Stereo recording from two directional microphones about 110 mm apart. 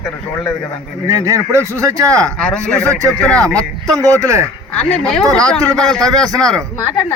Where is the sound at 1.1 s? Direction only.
30° right (ahead or behind).